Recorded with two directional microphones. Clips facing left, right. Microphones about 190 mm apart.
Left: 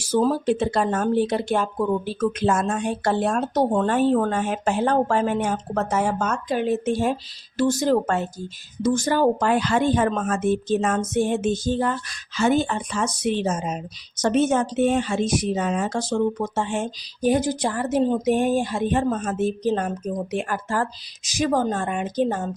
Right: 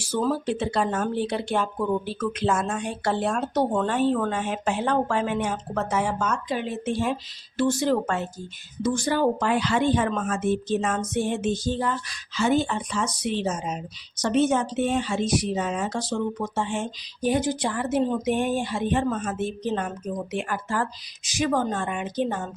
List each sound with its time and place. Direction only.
0.0 s speech: 45° left (ahead or behind)